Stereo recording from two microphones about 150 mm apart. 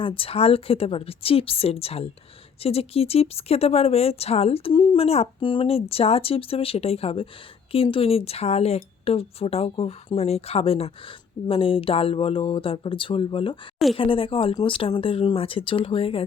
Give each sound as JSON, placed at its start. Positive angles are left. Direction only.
{"t": 0.0, "sound": "speech", "side_deg": 35}